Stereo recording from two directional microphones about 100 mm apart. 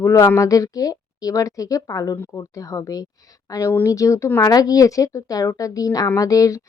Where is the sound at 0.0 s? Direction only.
30° left (ahead or behind).